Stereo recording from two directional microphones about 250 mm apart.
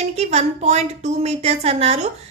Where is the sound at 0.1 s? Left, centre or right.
Right.